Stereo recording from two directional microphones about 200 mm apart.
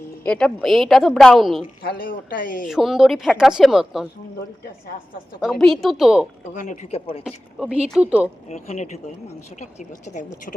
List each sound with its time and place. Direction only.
0.3 s a woman's voice: 5° left (ahead or behind)
1.8 s speech: 50° left (ahead or behind)
2.6 s a woman's voice: centre (ahead or behind)
5.4 s a woman's voice: centre (ahead or behind)
6.5 s speech: 35° left (ahead or behind)
7.3 s a woman's voice: 5° right (ahead or behind)
8.4 s speech: 35° left (ahead or behind)